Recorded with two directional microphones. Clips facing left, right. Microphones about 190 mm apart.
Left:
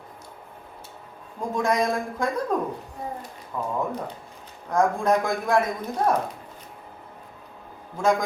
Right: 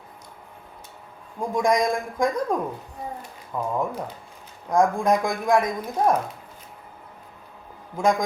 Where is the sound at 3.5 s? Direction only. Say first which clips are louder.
Right 2 dB; 10° right (ahead or behind).